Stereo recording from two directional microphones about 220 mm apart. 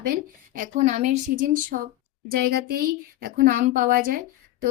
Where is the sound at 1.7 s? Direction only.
45° right (ahead or behind).